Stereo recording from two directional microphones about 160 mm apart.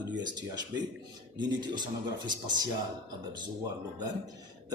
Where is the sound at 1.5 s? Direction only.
25° right (ahead or behind).